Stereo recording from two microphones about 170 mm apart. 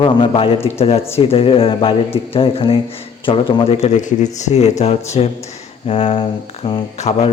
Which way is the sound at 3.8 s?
45° left (ahead or behind).